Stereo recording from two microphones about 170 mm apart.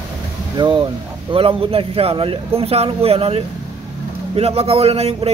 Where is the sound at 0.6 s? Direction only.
30° right (ahead or behind).